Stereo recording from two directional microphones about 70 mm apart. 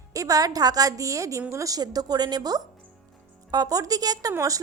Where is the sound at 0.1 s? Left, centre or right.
Right.